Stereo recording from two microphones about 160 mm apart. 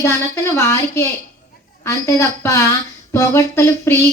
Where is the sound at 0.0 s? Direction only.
15° left (ahead or behind).